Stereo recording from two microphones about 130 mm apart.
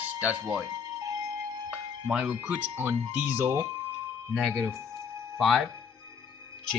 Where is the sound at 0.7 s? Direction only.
30° right (ahead or behind).